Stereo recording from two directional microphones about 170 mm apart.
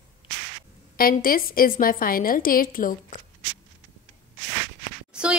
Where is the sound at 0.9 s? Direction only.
60° left (ahead or behind).